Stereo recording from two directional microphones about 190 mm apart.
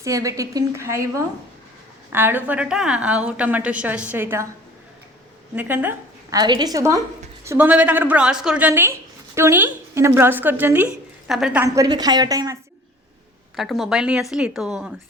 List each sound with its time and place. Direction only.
0.0 s a woman's voice: 15° right (ahead or behind)
5.5 s a woman's voice: 10° right (ahead or behind)
6.4 s a woman's voice: 20° right (ahead or behind)
13.6 s a woman's voice: centre (ahead or behind)